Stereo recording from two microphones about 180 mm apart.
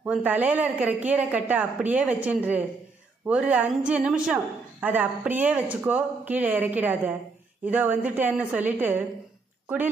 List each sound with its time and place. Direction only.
0.0 s a woman's voice: 5° right (ahead or behind)